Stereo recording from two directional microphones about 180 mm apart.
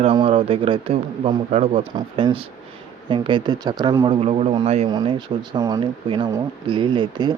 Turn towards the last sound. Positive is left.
turn(degrees=-25)  # may be behind; listen again after turning